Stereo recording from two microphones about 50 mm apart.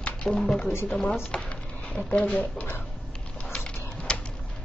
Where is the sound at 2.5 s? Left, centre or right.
Left.